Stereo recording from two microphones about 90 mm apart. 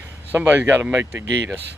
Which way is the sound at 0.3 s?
20° right (ahead or behind).